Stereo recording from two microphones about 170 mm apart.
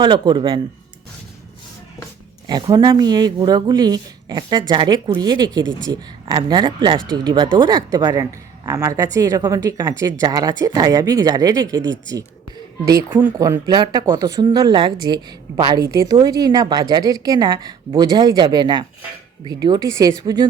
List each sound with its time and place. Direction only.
0.0 s speech: 30° right (ahead or behind)
2.5 s speech: 25° right (ahead or behind)
13.4 s speech: 25° right (ahead or behind)